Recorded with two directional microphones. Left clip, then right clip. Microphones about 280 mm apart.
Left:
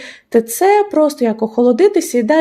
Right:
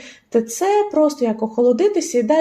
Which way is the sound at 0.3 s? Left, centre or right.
Left.